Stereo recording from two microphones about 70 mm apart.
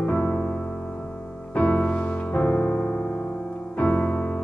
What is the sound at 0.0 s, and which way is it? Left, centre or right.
Music, left.